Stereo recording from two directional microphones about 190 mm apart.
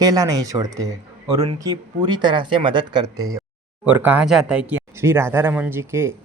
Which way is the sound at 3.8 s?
10° right (ahead or behind).